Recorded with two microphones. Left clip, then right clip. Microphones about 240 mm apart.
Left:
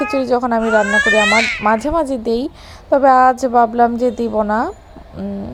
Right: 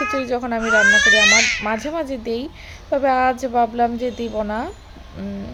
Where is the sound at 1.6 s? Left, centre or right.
Left.